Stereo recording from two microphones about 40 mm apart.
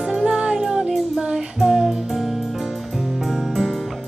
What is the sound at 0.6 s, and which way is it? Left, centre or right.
Music, centre.